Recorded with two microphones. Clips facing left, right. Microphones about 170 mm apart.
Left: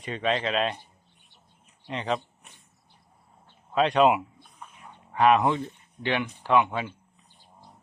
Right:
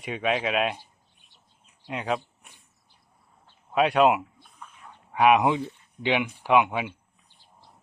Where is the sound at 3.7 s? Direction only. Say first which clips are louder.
Even; 10° right (ahead or behind).